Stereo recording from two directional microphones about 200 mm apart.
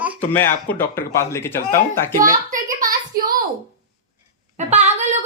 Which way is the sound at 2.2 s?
40° right (ahead or behind).